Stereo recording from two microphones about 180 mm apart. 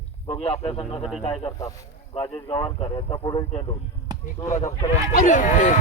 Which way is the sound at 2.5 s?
30° left (ahead or behind).